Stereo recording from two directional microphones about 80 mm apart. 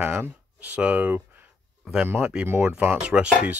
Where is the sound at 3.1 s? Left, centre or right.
Centre.